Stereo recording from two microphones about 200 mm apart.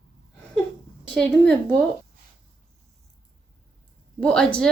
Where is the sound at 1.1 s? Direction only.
5° left (ahead or behind).